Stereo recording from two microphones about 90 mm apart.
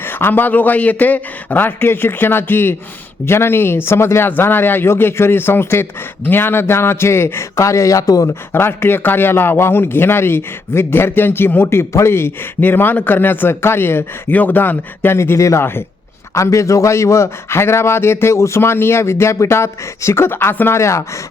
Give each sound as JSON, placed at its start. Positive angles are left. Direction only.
{"t": 0.0, "sound": "a man's voice", "side_deg": 25}
{"t": 8.5, "sound": "a man's voice", "side_deg": 25}